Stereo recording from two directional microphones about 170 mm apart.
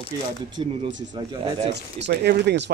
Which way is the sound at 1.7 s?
85° right.